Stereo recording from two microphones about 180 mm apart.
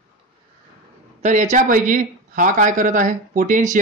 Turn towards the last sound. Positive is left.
turn(degrees=-45)  # may be behind; listen again after turning